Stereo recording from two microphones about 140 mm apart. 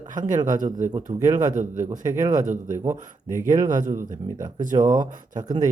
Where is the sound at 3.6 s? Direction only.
65° right (ahead or behind).